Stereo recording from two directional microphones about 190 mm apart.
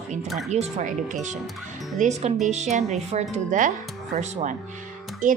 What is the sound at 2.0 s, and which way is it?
Speech, 35° right (ahead or behind).